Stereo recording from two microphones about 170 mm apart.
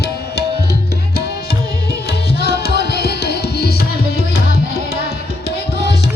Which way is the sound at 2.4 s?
70° left (ahead or behind).